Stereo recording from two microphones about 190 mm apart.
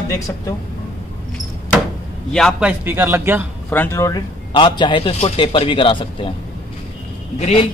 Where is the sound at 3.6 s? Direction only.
10° left (ahead or behind).